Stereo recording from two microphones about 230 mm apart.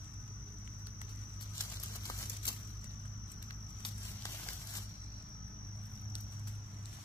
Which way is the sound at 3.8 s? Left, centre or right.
Centre.